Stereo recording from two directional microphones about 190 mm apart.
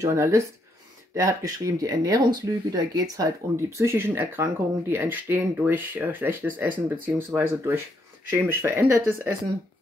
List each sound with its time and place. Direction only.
0.0 s speech: 15° right (ahead or behind)